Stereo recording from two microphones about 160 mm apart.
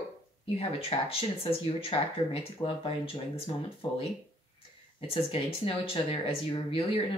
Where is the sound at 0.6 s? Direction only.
35° left (ahead or behind).